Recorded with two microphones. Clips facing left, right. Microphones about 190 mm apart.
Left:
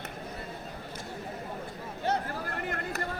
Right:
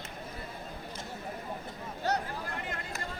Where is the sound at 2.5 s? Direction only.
55° left (ahead or behind).